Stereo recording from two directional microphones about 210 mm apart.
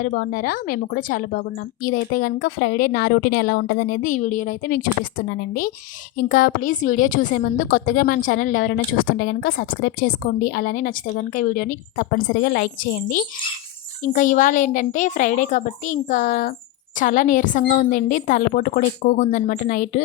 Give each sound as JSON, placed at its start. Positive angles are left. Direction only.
{"t": 0.0, "sound": "a woman's voice", "side_deg": 40}
{"t": 8.7, "sound": "speech", "side_deg": 70}
{"t": 9.0, "sound": "a woman's voice", "side_deg": 55}